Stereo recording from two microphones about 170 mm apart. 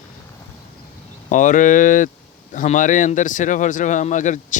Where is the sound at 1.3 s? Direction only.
50° left (ahead or behind).